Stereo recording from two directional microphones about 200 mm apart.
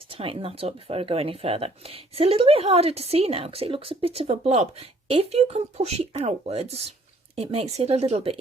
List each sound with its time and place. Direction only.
0.1 s speech: 30° right (ahead or behind)